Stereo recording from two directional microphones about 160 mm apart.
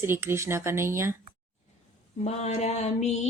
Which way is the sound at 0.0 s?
15° right (ahead or behind).